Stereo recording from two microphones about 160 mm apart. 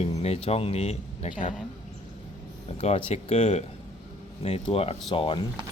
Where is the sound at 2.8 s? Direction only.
40° left (ahead or behind).